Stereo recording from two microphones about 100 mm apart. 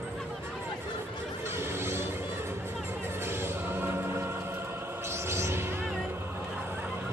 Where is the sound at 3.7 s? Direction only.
25° right (ahead or behind).